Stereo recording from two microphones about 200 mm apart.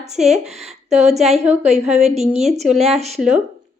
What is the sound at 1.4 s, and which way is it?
Speech, 10° right (ahead or behind).